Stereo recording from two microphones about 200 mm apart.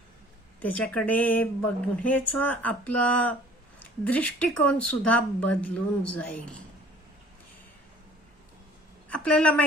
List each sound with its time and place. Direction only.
0.6 s a woman's voice: 10° left (ahead or behind)
9.0 s a woman's voice: 5° left (ahead or behind)